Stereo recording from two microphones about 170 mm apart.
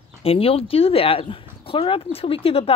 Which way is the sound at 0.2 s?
35° left (ahead or behind).